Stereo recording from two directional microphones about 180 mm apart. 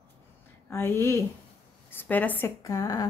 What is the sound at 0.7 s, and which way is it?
Speech, 15° left (ahead or behind).